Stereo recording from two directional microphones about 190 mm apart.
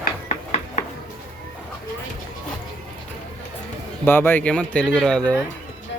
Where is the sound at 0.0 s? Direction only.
40° left (ahead or behind).